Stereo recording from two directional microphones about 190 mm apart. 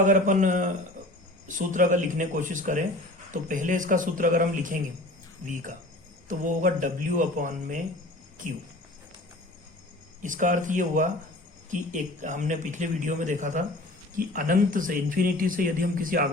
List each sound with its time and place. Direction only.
0.0 s a man's voice: 40° right (ahead or behind)
6.2 s speech: 40° right (ahead or behind)
10.2 s a man's voice: 40° right (ahead or behind)